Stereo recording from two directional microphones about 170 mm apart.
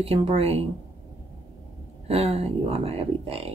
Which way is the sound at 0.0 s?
35° right (ahead or behind).